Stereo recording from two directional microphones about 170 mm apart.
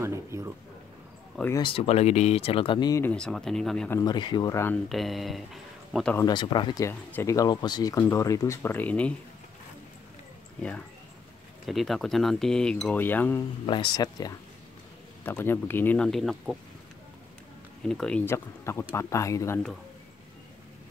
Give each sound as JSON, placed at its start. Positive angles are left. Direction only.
{"t": 0.0, "sound": "a man's voice", "side_deg": -15}
{"t": 1.5, "sound": "speech", "side_deg": 30}
{"t": 3.0, "sound": "speech", "side_deg": 5}
{"t": 4.0, "sound": "speech", "side_deg": 25}
{"t": 4.8, "sound": "speech", "side_deg": 0}
{"t": 6.1, "sound": "speech", "side_deg": 25}
{"t": 11.6, "sound": "speech", "side_deg": 0}
{"t": 13.7, "sound": "speech", "side_deg": 25}
{"t": 15.2, "sound": "speech", "side_deg": 10}
{"t": 17.8, "sound": "speech", "side_deg": 5}